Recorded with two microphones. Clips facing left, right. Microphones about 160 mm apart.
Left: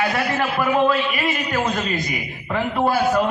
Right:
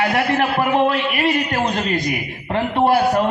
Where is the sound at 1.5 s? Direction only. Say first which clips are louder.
Right 2 dB; 35° right (ahead or behind).